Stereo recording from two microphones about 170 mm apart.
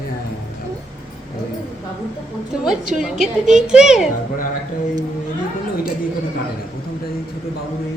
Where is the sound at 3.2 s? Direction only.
5° right (ahead or behind).